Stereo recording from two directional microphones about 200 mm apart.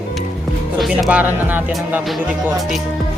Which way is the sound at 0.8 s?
Centre (ahead or behind).